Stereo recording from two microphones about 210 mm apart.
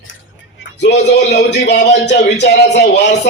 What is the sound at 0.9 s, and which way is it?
A man's voice, 55° left (ahead or behind).